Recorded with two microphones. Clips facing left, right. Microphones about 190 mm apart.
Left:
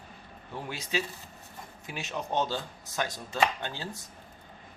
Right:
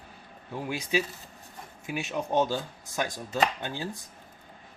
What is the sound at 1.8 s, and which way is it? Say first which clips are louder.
Speech: right 5 dB; 15° right (ahead or behind).